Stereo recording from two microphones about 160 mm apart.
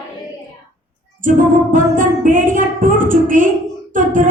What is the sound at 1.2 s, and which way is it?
Music, 55° right (ahead or behind).